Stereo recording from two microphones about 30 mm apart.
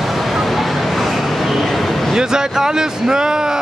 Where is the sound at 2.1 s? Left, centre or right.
Right.